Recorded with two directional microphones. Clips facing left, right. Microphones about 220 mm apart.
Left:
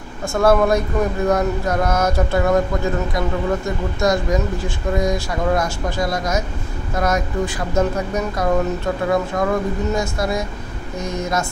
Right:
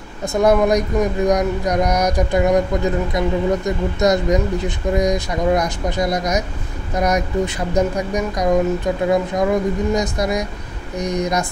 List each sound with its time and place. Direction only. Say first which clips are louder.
0.3 s speech: right 1 dB; 15° right (ahead or behind)